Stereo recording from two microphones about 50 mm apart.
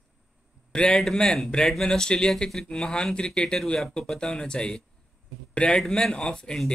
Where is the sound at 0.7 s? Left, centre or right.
Centre.